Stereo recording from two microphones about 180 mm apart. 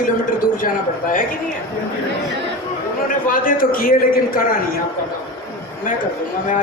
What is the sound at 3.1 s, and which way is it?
Speech, 50° left (ahead or behind).